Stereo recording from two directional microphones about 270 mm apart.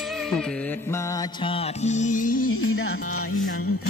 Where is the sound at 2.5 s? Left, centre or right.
Left.